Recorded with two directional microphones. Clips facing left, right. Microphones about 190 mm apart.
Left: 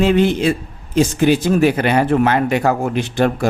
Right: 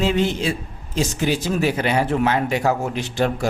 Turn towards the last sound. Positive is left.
turn(degrees=55)  # may be behind; listen again after turning